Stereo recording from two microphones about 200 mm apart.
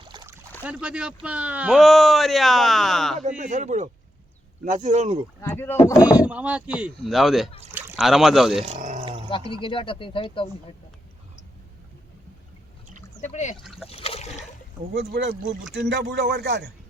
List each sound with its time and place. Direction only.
0.1 s boat: 20° right (ahead or behind)
0.6 s speech: 5° right (ahead or behind)
3.2 s speech: 40° right (ahead or behind)
5.4 s speech: 10° left (ahead or behind)
6.0 s speech: 5° right (ahead or behind)
8.6 s speech: 35° right (ahead or behind)
9.5 s speech: 25° left (ahead or behind)
13.2 s speech: 35° left (ahead or behind)
13.8 s water: 30° left (ahead or behind)
14.9 s a man's voice: 55° right (ahead or behind)